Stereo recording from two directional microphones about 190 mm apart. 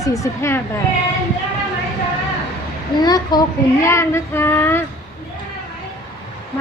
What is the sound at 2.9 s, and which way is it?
A woman's voice, 20° left (ahead or behind).